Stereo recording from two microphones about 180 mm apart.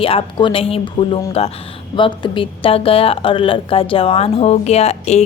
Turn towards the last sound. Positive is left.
turn(degrees=35)  # may be behind; listen again after turning